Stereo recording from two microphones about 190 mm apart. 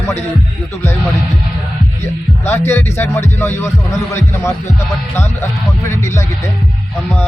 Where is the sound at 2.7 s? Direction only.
10° left (ahead or behind).